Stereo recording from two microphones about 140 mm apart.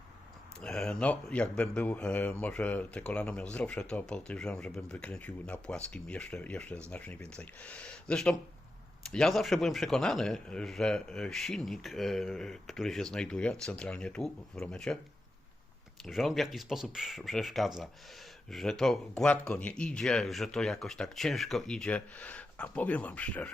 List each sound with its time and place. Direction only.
0.6 s a man's voice: 5° left (ahead or behind)
16.0 s a man's voice: centre (ahead or behind)